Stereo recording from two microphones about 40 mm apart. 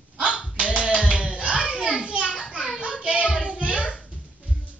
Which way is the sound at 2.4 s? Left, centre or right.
Right.